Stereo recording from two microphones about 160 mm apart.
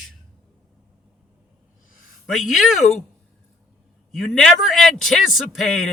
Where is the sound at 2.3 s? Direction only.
Centre (ahead or behind).